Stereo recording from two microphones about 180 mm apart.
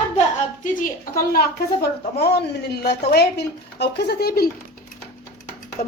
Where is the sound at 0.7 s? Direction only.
50° left (ahead or behind).